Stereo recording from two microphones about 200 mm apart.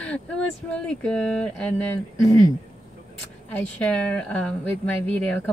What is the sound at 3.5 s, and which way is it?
A woman's voice, 5° left (ahead or behind).